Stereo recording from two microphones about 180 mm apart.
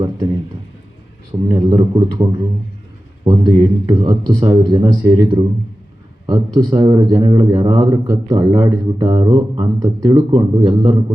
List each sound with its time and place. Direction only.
1.3 s a man's voice: 20° right (ahead or behind)